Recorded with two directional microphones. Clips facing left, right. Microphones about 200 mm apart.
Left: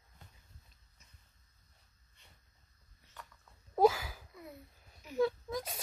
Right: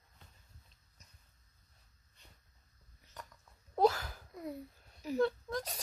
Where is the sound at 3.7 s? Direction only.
5° left (ahead or behind).